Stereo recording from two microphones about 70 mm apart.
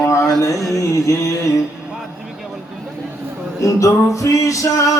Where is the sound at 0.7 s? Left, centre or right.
Left.